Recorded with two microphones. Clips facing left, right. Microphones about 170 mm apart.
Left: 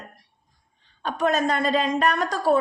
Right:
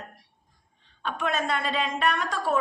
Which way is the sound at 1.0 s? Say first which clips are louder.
Left 6 dB; 40° left (ahead or behind).